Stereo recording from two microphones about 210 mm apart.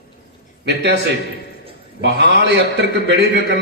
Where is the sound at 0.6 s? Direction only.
55° right (ahead or behind).